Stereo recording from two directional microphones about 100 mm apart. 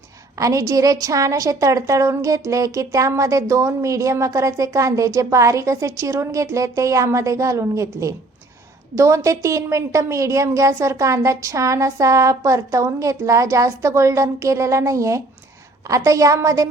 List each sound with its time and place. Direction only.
0.3 s a woman's voice: 35° right (ahead or behind)